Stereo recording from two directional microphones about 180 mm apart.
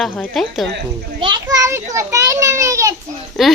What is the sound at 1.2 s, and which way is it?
A child's voice, 25° right (ahead or behind).